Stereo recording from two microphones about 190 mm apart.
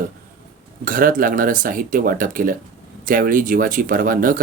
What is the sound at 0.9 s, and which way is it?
Speech, 45° right (ahead or behind).